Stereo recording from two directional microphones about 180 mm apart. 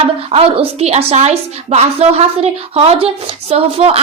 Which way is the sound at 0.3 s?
30° right (ahead or behind).